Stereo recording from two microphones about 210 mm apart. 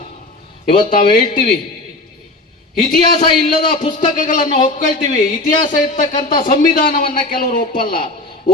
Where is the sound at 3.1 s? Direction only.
25° left (ahead or behind).